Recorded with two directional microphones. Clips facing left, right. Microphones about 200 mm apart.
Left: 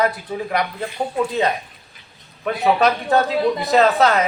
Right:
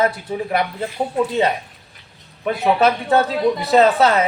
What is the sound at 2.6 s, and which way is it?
Speech, 5° right (ahead or behind).